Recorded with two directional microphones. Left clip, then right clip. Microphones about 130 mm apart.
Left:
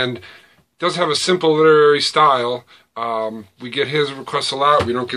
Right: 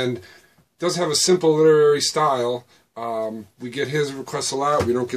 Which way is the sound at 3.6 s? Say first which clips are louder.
Left 5 dB; 30° right (ahead or behind).